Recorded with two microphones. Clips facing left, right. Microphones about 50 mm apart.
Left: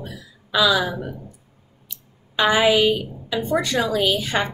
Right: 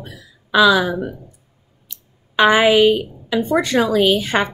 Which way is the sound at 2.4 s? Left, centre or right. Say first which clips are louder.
Right 5 dB; right.